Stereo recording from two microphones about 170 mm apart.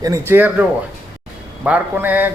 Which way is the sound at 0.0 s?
15° right (ahead or behind).